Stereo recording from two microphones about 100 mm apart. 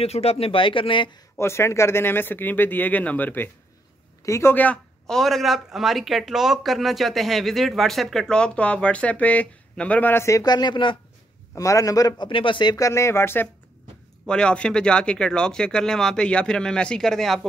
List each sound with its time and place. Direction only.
0.0 s speech: 90° left; by 1.1 s 55° left (ahead or behind)
1.4 s speech: 25° left (ahead or behind)
4.2 s speech: 30° left (ahead or behind)
5.0 s speech: 5° left (ahead or behind); by 10.4 s 25° left (ahead or behind)
10.4 s speech: 45° left (ahead or behind)
11.5 s a man's voice: 35° left (ahead or behind)
12.3 s speech: 60° left (ahead or behind)
12.7 s speech: 30° left (ahead or behind)
14.2 s speech: 10° left (ahead or behind)